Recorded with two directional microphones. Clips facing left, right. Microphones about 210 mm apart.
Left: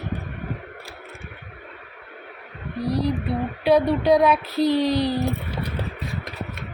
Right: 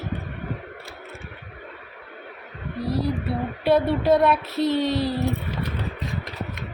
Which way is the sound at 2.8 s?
Centre (ahead or behind).